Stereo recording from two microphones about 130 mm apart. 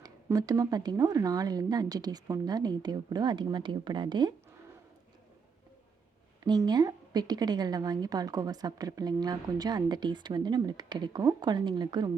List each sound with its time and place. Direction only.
0.3 s a woman's voice: 25° right (ahead or behind)
6.4 s a woman's voice: 30° right (ahead or behind)